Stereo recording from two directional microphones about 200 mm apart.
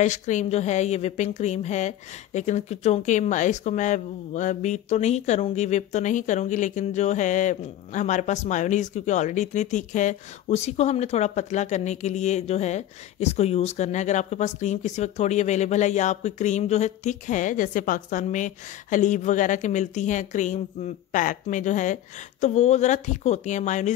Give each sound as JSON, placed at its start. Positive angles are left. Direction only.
{"t": 0.0, "sound": "a woman's voice", "side_deg": 35}